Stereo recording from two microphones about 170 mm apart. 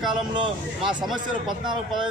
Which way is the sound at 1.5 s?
25° right (ahead or behind).